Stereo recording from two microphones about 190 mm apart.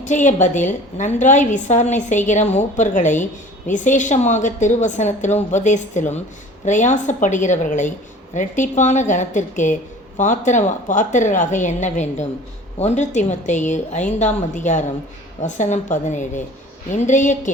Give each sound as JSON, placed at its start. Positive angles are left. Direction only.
{"t": 0.0, "sound": "a woman's voice", "side_deg": 40}